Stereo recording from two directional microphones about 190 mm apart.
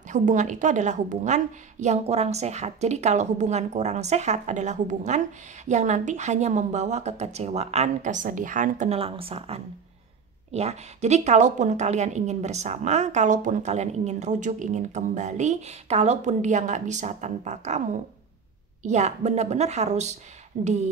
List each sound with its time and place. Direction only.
0.1 s a woman's voice: 40° right (ahead or behind)